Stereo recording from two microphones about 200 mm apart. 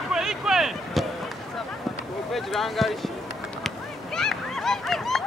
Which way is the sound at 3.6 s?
Centre (ahead or behind).